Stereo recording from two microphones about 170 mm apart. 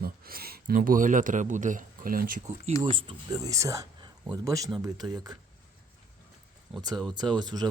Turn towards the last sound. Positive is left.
turn(degrees=-25)  # may be behind; listen again after turning